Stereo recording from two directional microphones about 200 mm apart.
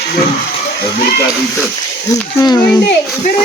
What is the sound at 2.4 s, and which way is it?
Speech, 20° left (ahead or behind).